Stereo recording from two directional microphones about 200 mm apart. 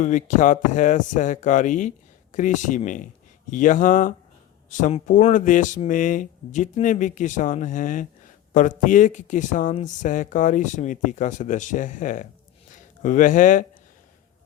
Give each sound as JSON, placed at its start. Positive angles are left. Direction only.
{"t": 0.0, "sound": "speech", "side_deg": 40}